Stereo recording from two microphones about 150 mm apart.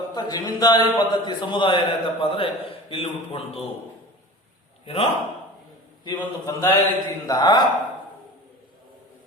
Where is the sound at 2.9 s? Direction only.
40° left (ahead or behind).